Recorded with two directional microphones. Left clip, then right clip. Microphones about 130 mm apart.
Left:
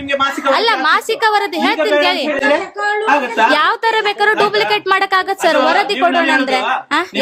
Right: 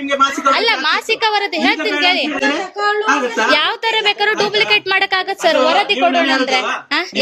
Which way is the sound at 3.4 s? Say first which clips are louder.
Left 2 dB; 35° left (ahead or behind).